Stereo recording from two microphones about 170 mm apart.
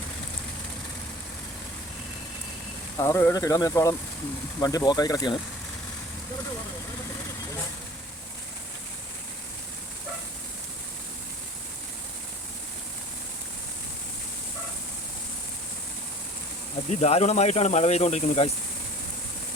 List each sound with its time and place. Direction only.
3.0 s speech: 15° left (ahead or behind)
16.9 s speech: 40° left (ahead or behind)